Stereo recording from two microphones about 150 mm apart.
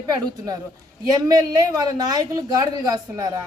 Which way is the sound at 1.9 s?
25° right (ahead or behind).